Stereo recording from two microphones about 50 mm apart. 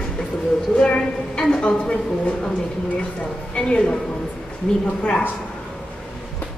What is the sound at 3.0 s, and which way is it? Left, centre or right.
A woman's voice, centre.